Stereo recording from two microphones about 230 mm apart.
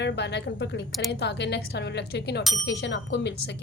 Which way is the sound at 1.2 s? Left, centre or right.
Left.